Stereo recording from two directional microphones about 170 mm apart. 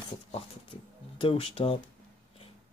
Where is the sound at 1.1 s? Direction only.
30° left (ahead or behind).